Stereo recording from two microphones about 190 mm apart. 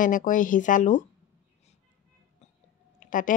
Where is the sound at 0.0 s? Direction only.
45° left (ahead or behind).